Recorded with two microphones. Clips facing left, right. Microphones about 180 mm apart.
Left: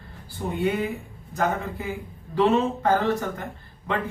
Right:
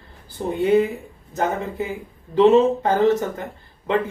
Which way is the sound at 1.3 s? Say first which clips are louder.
Right 2 dB; 25° right (ahead or behind).